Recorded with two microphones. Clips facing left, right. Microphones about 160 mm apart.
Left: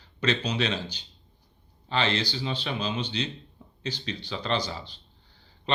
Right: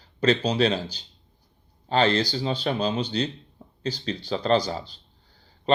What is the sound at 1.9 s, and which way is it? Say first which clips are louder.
Speech: right 6 dB; 45° right (ahead or behind).